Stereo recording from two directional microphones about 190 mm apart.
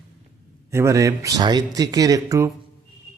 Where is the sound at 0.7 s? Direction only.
15° right (ahead or behind).